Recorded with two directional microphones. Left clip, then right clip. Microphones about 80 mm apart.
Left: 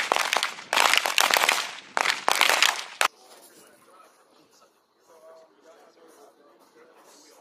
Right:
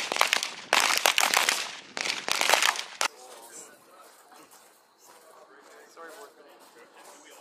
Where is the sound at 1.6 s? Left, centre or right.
Left.